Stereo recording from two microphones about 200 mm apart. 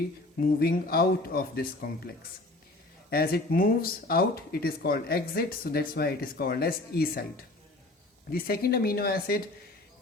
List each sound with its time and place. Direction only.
0.3 s speech: 50° left (ahead or behind)